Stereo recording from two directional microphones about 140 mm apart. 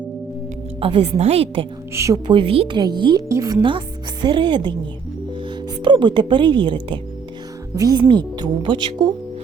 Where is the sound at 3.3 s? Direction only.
20° right (ahead or behind).